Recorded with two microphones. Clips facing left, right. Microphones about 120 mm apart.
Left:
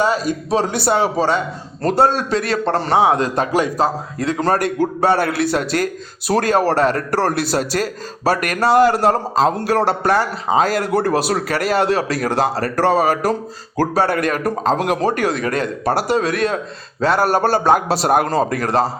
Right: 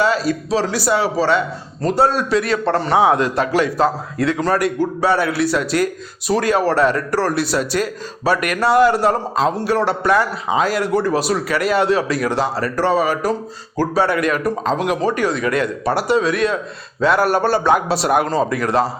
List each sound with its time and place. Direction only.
0.0 s a man's voice: 15° left (ahead or behind)
0.8 s a man's voice: 50° left (ahead or behind)
2.0 s a man's voice: 40° left (ahead or behind)
7.1 s a man's voice: 50° left (ahead or behind)
7.5 s a man's voice: 40° left (ahead or behind)
10.9 s a man's voice: 60° left (ahead or behind)
11.5 s a man's voice: 40° left (ahead or behind)